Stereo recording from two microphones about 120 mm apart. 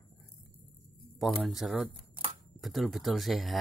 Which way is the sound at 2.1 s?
50° right (ahead or behind).